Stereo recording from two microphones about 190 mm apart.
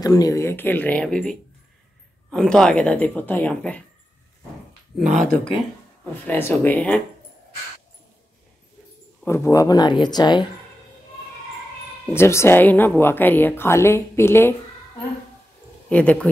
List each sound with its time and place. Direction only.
0.0 s speech: 20° left (ahead or behind); by 1.3 s 5° left (ahead or behind)
2.3 s speech: 5° left (ahead or behind)
6.2 s speech: 10° left (ahead or behind)
9.2 s speech: 15° left (ahead or behind)
12.1 s speech: 15° left (ahead or behind)
15.9 s speech: 5° left (ahead or behind)